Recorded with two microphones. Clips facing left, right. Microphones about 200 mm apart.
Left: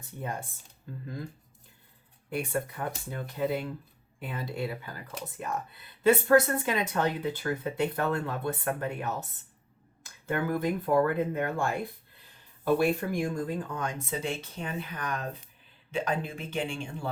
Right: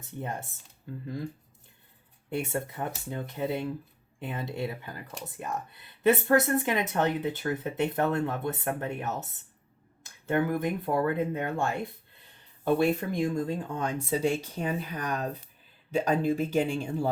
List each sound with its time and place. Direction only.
0.0 s speech: 20° right (ahead or behind)
2.3 s speech: 20° right (ahead or behind)
6.0 s speech: 20° right (ahead or behind); by 17.1 s 40° right (ahead or behind)